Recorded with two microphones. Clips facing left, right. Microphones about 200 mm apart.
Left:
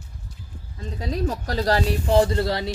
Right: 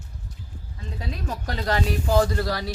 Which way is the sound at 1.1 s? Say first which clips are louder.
Left 6 dB; 35° left (ahead or behind).